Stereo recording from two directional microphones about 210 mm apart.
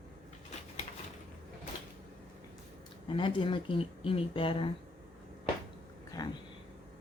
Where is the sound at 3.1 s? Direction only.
25° left (ahead or behind).